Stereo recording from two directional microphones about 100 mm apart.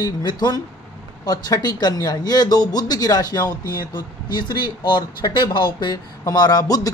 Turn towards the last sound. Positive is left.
turn(degrees=40)  # may be behind; listen again after turning